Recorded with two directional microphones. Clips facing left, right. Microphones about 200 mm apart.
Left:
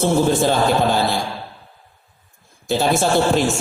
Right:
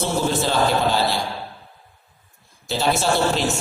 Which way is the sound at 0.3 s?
50° left (ahead or behind).